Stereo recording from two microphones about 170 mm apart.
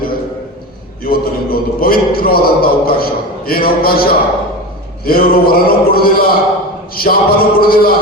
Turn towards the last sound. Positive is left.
turn(degrees=60)  # may be behind; listen again after turning